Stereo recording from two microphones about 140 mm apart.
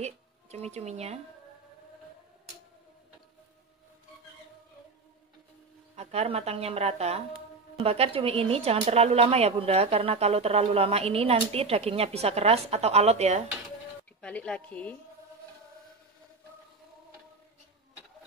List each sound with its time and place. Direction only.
0.0 s speech: 50° right (ahead or behind)
5.9 s speech: 45° right (ahead or behind)
14.2 s speech: 10° left (ahead or behind)